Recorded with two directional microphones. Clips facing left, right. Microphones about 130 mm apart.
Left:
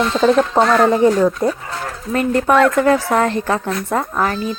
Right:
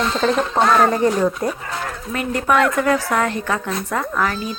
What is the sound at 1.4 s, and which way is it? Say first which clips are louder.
Speech: left 5 dB; 25° left (ahead or behind).